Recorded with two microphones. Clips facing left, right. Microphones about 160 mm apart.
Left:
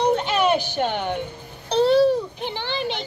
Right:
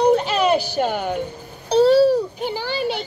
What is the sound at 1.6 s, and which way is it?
Babbling, 40° right (ahead or behind).